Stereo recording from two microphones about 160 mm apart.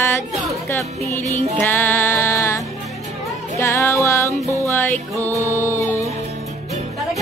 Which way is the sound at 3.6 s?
15° left (ahead or behind).